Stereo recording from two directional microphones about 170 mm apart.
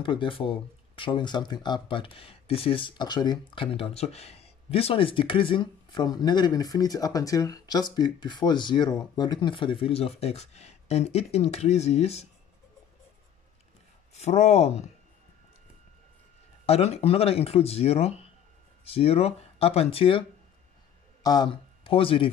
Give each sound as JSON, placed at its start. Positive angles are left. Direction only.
{"t": 0.0, "sound": "speech", "side_deg": 30}
{"t": 14.1, "sound": "speech", "side_deg": 40}
{"t": 16.6, "sound": "speech", "side_deg": 35}